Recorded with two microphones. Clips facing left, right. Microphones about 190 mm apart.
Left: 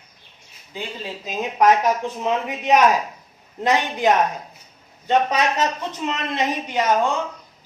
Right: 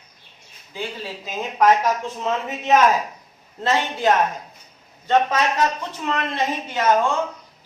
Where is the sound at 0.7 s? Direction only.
15° left (ahead or behind).